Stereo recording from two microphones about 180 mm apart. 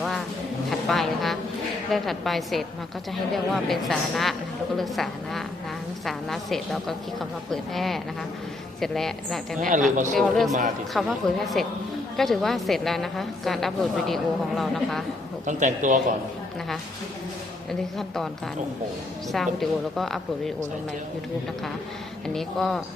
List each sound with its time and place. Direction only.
0.7 s a sound: centre (ahead or behind)
1.9 s a woman's voice: centre (ahead or behind)
9.6 s a man's voice: 45° right (ahead or behind)
10.2 s a woman's voice: centre (ahead or behind)
15.4 s a man's voice: 45° right (ahead or behind)
17.7 s a woman's voice: centre (ahead or behind)
19.3 s a woman's voice: centre (ahead or behind)
22.3 s a woman's voice: centre (ahead or behind)